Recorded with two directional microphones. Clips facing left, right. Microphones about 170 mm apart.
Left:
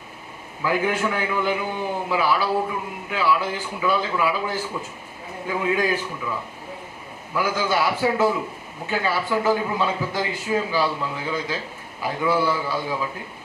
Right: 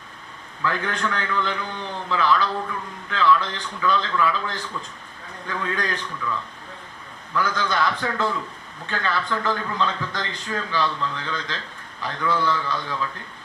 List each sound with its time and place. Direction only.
0.6 s a man's voice: 10° left (ahead or behind)
6.1 s a man's voice: 20° left (ahead or behind)
7.3 s a man's voice: 5° left (ahead or behind)